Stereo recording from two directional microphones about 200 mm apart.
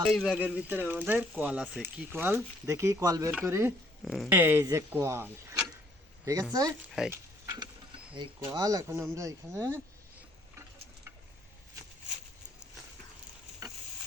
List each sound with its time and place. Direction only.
0.1 s speech: centre (ahead or behind)
2.1 s speech: 10° right (ahead or behind)
4.0 s speech: centre (ahead or behind); by 9.6 s 15° right (ahead or behind)